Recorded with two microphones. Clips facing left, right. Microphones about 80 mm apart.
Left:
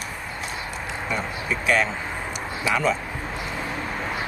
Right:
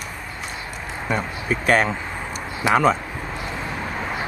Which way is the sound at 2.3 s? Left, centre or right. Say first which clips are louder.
Right 6 dB; right.